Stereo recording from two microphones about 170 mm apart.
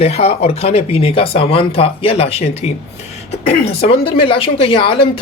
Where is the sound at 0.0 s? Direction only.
35° left (ahead or behind).